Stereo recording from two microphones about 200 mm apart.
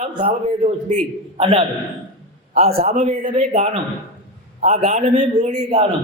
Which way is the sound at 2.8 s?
30° right (ahead or behind).